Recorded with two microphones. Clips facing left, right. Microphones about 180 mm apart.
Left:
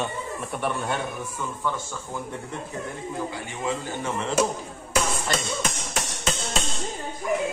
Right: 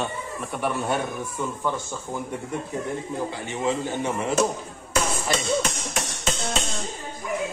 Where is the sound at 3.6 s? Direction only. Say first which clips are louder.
Right 4 dB; 15° right (ahead or behind).